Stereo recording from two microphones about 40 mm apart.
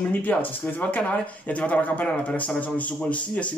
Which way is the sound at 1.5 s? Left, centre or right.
Left.